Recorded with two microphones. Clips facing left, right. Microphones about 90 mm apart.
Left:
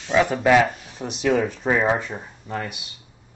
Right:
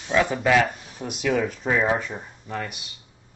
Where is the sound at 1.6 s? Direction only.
35° left (ahead or behind).